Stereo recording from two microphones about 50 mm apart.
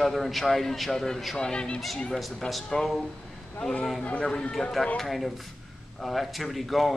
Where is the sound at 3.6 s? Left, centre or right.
Centre.